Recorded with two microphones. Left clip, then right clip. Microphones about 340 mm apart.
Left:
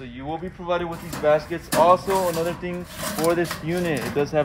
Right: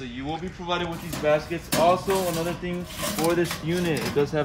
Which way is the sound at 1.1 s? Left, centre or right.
Centre.